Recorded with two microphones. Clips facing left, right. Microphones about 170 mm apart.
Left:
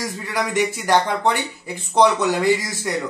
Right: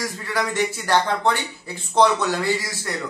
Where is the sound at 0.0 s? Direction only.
15° left (ahead or behind).